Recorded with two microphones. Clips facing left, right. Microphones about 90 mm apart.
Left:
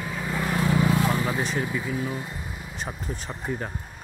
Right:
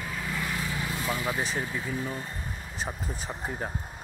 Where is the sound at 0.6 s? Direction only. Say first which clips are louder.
Left 10 dB; 80° left.